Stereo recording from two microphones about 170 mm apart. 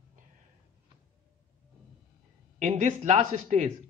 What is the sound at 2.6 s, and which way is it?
Speech, 40° right (ahead or behind).